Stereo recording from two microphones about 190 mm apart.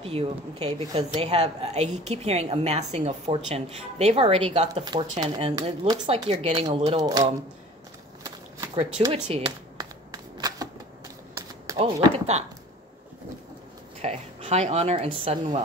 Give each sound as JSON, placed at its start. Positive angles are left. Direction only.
{"t": 0.0, "sound": "a woman's voice", "side_deg": -30}
{"t": 9.1, "sound": "shuffling cards", "side_deg": -25}
{"t": 11.3, "sound": "a sound", "side_deg": -15}
{"t": 11.8, "sound": "a woman's voice", "side_deg": -35}
{"t": 14.0, "sound": "a woman's voice", "side_deg": -35}